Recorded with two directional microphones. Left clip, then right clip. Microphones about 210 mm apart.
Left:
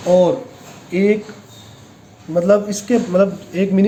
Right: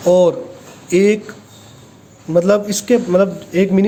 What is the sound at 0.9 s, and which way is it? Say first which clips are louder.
Speech: right 3 dB; 45° right (ahead or behind).